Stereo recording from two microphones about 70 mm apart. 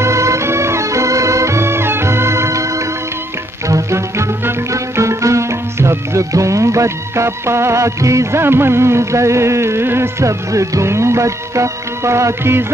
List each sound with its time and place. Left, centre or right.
0.0 s music: right